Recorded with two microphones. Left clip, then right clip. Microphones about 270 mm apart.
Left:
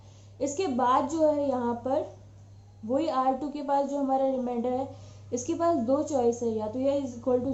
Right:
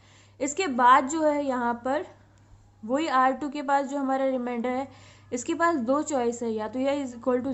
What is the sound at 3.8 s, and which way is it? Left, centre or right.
Speech, right.